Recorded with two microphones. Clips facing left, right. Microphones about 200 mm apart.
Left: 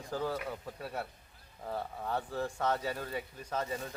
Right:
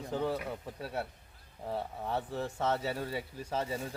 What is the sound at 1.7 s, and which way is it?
Speech, 25° right (ahead or behind).